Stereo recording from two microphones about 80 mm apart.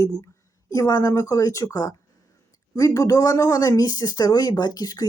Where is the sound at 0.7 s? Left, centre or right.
Left.